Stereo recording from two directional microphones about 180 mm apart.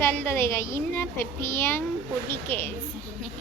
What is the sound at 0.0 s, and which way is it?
A woman's voice, 10° left (ahead or behind).